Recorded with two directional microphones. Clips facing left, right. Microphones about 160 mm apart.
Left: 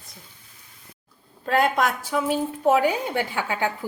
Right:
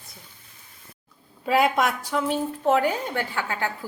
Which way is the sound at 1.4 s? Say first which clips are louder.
Even; 5° right (ahead or behind).